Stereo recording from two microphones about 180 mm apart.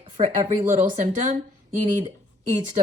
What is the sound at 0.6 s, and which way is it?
Speech, 40° right (ahead or behind).